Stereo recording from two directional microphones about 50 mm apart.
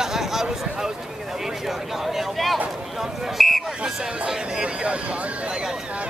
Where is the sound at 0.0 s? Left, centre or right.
Centre.